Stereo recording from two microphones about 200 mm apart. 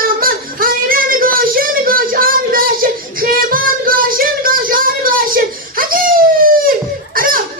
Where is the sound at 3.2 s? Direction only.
45° right (ahead or behind).